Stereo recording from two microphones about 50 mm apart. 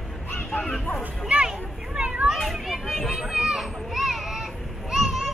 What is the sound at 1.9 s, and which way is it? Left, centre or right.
Children playing, right.